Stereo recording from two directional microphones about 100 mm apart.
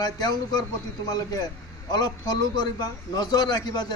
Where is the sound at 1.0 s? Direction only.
40° left (ahead or behind).